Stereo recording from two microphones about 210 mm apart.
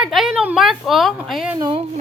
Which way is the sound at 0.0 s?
Centre (ahead or behind).